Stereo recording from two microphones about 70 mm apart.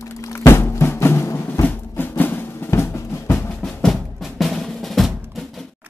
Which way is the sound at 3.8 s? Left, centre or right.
Centre.